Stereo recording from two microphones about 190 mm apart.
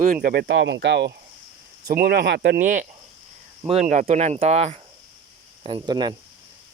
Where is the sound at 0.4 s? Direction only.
75° right (ahead or behind).